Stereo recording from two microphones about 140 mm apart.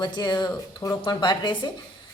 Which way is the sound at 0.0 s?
30° left (ahead or behind).